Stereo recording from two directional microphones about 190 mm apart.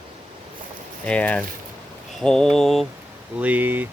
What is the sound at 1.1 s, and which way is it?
Speech, 5° left (ahead or behind).